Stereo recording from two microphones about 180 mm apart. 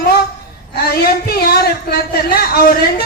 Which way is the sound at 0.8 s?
60° left (ahead or behind).